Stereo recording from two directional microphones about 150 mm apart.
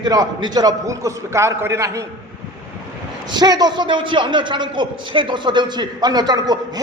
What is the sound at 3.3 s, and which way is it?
A man's voice, 30° right (ahead or behind).